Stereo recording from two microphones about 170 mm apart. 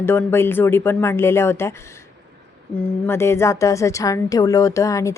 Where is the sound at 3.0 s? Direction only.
15° left (ahead or behind).